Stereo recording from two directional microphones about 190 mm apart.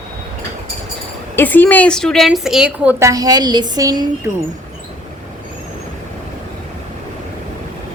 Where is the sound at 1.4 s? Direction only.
10° left (ahead or behind); by 3.1 s 5° right (ahead or behind).